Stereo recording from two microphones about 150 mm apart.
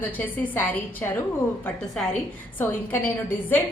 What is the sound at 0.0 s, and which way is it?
A woman's voice, 10° left (ahead or behind).